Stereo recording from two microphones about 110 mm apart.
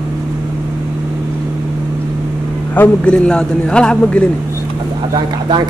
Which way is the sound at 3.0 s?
10° left (ahead or behind).